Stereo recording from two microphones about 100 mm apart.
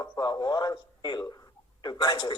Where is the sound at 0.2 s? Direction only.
45° left (ahead or behind).